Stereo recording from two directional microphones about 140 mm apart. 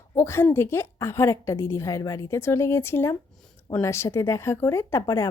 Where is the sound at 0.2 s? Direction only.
20° left (ahead or behind).